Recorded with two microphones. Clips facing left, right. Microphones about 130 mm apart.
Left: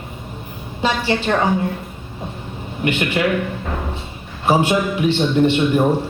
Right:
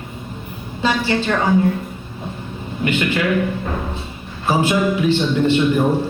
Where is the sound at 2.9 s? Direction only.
20° left (ahead or behind).